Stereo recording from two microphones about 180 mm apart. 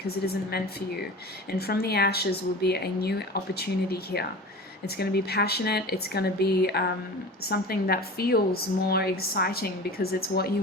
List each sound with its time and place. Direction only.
0.2 s a woman's voice: 60° left (ahead or behind)
1.5 s a woman's voice: 60° left (ahead or behind)